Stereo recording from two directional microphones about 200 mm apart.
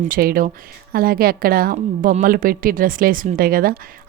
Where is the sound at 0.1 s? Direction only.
45° right (ahead or behind).